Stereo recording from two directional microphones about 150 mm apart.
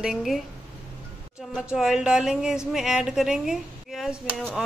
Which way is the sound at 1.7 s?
5° right (ahead or behind).